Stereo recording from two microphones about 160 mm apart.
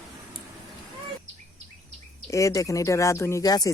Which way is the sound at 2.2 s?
20° left (ahead or behind).